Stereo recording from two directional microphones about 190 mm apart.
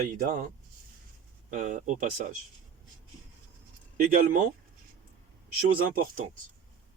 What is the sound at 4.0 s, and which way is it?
Speech, 45° right (ahead or behind).